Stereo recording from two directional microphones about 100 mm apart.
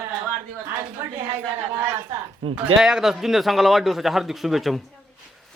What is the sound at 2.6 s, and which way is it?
A man's voice, 5° right (ahead or behind).